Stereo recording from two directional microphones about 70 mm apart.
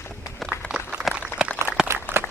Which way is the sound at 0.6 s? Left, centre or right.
Centre.